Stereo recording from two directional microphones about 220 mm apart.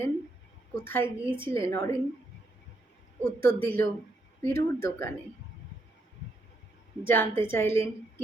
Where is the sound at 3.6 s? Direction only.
10° left (ahead or behind).